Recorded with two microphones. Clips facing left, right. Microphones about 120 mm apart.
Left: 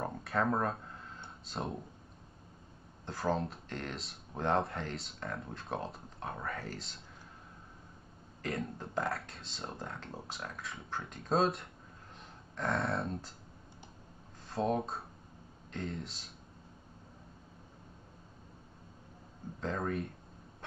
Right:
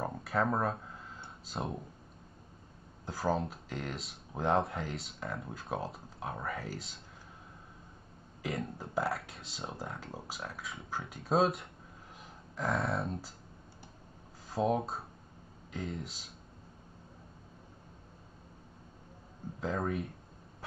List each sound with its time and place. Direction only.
0.0 s a sound: centre (ahead or behind)
3.1 s speech: centre (ahead or behind)
8.4 s speech: 5° right (ahead or behind)
14.5 s speech: centre (ahead or behind)
19.6 s speech: 5° right (ahead or behind)